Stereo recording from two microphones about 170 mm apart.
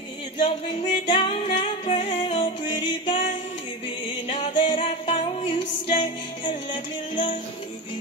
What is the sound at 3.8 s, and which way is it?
Music, 35° left (ahead or behind).